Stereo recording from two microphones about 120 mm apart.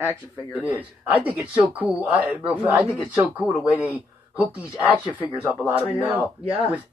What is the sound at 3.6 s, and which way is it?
Speech, 15° right (ahead or behind).